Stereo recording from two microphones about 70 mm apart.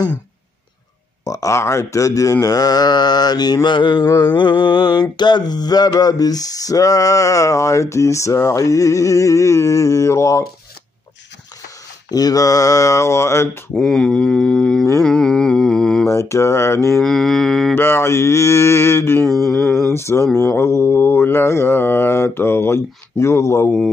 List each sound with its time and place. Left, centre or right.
1.2 s mantra: left
2.4 s mantra: left
12.1 s mantra: left
13.7 s speech: centre
15.0 s mantra: centre
16.1 s mantra: left
17.0 s mantra: centre
17.7 s mantra: left